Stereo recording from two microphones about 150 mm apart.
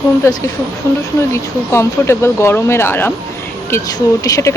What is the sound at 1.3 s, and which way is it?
Speech, 15° left (ahead or behind).